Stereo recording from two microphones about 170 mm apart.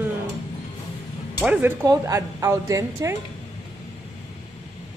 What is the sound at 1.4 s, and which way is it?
A woman's voice, 10° right (ahead or behind).